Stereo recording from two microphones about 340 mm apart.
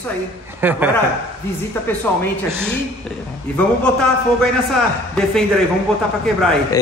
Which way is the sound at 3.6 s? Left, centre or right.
Centre.